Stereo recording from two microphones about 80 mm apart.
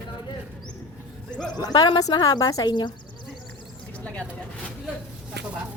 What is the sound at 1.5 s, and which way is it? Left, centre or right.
A woman's voice, left.